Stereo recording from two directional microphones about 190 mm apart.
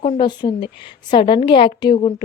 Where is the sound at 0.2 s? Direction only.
25° left (ahead or behind).